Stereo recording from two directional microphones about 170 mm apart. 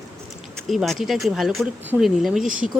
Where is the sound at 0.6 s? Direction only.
Centre (ahead or behind).